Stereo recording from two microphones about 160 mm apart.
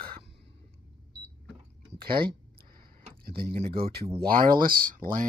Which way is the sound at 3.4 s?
40° right (ahead or behind).